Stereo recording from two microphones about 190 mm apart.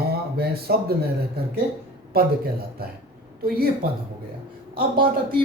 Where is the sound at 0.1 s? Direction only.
55° right (ahead or behind).